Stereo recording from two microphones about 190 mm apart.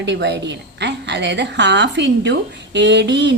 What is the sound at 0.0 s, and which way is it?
A woman's voice, 65° right (ahead or behind).